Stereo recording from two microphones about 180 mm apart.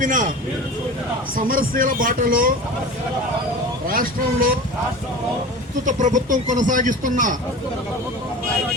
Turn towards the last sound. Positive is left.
turn(degrees=-45)  # may be behind; listen again after turning